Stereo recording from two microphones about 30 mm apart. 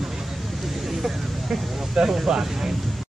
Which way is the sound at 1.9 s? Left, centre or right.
Centre.